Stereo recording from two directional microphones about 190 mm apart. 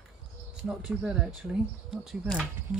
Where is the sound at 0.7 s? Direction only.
5° right (ahead or behind).